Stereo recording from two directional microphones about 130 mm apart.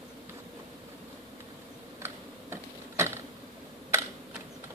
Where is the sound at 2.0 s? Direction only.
20° right (ahead or behind).